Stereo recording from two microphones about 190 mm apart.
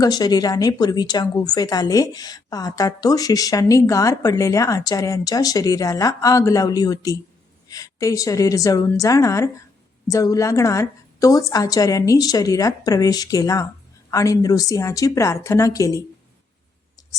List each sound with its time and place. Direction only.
0.0 s a woman's voice: 20° left (ahead or behind)